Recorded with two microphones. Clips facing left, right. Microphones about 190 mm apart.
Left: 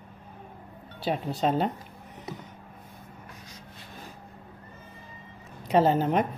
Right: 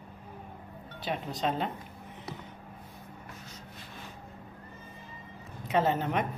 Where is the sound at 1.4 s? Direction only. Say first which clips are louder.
Left 6 dB; 40° left (ahead or behind).